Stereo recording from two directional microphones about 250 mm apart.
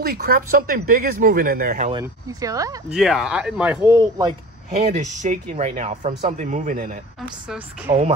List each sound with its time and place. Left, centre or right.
0.0 s speech: right
1.9 s speech: centre
2.9 s speech: centre
4.6 s speech: right
7.4 s speech: centre